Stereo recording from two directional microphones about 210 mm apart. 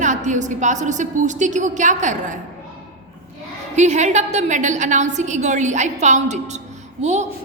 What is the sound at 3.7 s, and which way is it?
A woman's voice, 35° right (ahead or behind).